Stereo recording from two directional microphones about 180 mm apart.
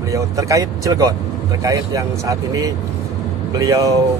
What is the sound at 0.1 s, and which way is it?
Speech, 20° right (ahead or behind).